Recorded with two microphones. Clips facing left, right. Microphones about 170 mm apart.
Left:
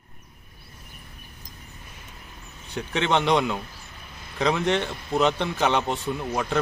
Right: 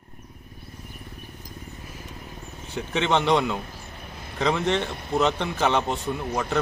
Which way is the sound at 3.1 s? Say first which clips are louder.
Even; 15° left (ahead or behind).